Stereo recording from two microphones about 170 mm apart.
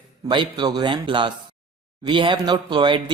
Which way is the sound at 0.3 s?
25° right (ahead or behind).